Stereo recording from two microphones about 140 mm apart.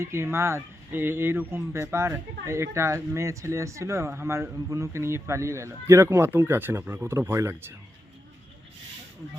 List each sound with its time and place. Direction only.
0.0 s speech: 20° right (ahead or behind)